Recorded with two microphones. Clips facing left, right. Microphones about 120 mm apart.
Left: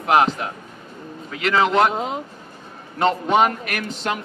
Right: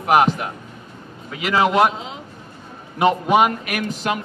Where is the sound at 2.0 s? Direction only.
50° left (ahead or behind).